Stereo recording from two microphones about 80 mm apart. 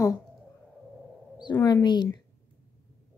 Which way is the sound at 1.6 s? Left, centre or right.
Left.